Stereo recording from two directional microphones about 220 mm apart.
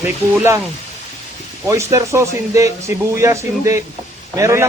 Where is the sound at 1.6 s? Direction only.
15° right (ahead or behind).